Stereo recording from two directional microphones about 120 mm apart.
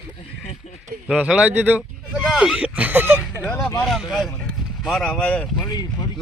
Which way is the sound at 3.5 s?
10° left (ahead or behind).